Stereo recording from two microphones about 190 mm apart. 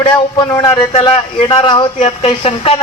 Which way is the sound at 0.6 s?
25° left (ahead or behind).